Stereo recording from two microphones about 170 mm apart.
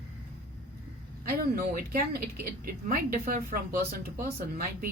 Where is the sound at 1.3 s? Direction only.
60° right (ahead or behind).